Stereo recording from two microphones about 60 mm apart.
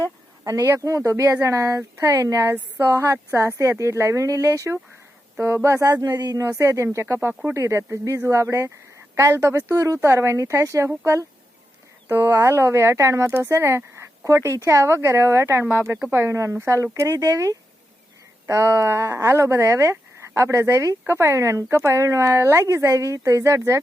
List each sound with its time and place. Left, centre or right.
0.8 s speech: right
5.4 s speech: right
6.1 s speech: right
7.5 s speech: right
18.4 s speech: right